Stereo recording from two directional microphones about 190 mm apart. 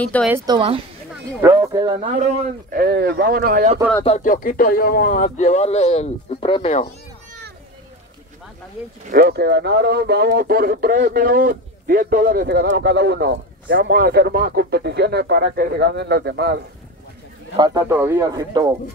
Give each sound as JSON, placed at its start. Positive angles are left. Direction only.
{"t": 0.0, "sound": "a woman's voice", "side_deg": 5}
{"t": 0.5, "sound": "a woman's voice", "side_deg": -25}
{"t": 2.7, "sound": "speech", "side_deg": -55}
{"t": 4.0, "sound": "speech", "side_deg": 40}
{"t": 9.1, "sound": "speech", "side_deg": -55}
{"t": 17.6, "sound": "a man's voice", "side_deg": -20}